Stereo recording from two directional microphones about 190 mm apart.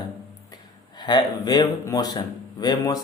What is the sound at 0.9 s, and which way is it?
Speech, 20° left (ahead or behind).